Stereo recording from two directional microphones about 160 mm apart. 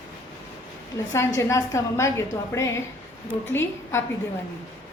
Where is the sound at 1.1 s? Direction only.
20° left (ahead or behind).